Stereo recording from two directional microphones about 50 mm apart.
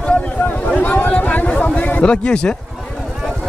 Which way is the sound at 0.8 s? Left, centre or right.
Left.